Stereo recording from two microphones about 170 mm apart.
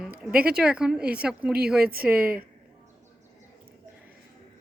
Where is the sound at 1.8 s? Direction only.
60° right (ahead or behind).